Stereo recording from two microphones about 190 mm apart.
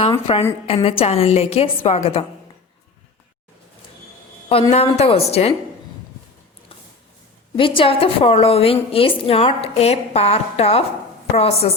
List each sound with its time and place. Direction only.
0.1 s a woman's voice: 25° left (ahead or behind)
4.7 s a woman's voice: 35° left (ahead or behind)
7.5 s a woman's voice: 25° left (ahead or behind)